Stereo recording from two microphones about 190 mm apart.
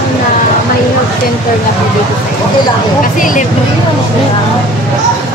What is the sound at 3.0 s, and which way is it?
Speech, 45° left (ahead or behind).